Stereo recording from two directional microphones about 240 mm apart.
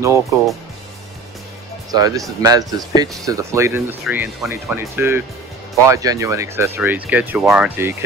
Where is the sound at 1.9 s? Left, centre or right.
Centre.